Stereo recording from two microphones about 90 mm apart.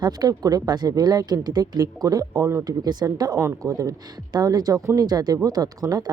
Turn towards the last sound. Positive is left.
turn(degrees=-45)  # may be behind; listen again after turning